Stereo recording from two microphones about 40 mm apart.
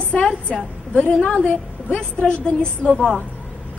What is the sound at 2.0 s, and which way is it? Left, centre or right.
Speech, left.